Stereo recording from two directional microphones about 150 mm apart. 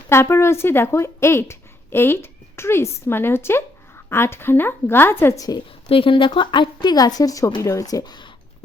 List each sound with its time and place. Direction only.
0.1 s speech: 15° left (ahead or behind)
5.9 s a woman's voice: 35° left (ahead or behind)